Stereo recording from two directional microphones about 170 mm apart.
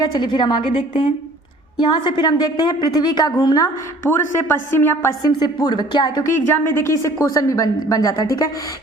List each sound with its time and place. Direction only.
0.0 s a woman's voice: 25° left (ahead or behind)
2.0 s a woman's voice: 25° left (ahead or behind)
5.5 s a woman's voice: 25° left (ahead or behind)
6.3 s a woman's voice: 15° left (ahead or behind)